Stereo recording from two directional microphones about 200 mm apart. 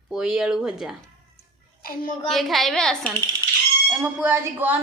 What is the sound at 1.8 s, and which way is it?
Speech, 45° left (ahead or behind).